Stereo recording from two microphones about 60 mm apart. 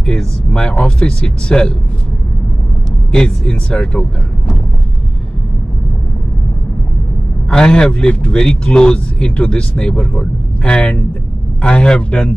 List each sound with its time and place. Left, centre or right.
0.0 s a man's voice: centre
3.1 s a man's voice: centre
7.4 s a man's voice: centre